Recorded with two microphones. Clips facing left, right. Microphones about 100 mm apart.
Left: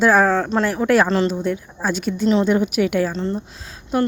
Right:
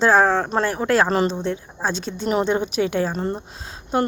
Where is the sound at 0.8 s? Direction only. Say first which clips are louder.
Left 2 dB; 20° right (ahead or behind).